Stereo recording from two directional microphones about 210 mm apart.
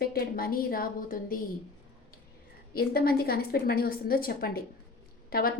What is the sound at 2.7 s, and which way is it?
Speech, 45° left (ahead or behind).